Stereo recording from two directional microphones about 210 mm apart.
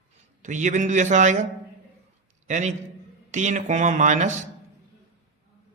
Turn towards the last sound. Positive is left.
turn(degrees=-35)  # may be behind; listen again after turning